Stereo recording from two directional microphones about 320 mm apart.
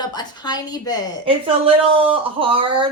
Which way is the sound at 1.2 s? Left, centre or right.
Centre.